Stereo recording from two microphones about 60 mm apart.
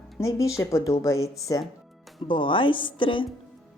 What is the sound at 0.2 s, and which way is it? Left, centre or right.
Speech, left.